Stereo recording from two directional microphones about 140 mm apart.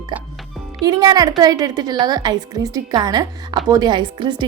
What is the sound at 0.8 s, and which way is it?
A woman's voice, 30° right (ahead or behind).